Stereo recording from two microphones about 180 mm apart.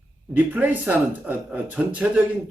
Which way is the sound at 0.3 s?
10° right (ahead or behind).